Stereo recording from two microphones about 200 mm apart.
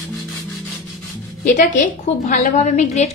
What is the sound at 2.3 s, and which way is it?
Speech, 40° left (ahead or behind).